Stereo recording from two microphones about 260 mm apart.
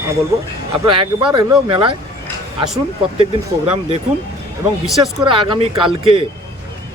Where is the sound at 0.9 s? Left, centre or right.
Centre.